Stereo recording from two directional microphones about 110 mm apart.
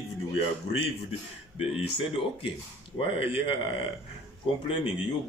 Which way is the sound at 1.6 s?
55° left (ahead or behind).